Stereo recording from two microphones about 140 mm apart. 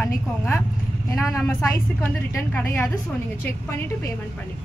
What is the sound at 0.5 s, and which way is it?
A woman's voice, 20° left (ahead or behind).